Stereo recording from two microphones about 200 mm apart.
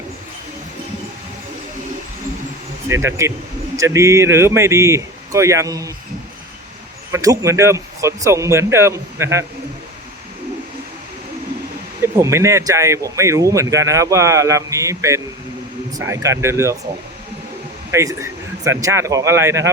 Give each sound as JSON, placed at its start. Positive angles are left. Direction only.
{"t": 2.9, "sound": "speech", "side_deg": -15}
{"t": 7.1, "sound": "speech", "side_deg": -15}
{"t": 12.0, "sound": "speech", "side_deg": -15}
{"t": 17.9, "sound": "speech", "side_deg": -15}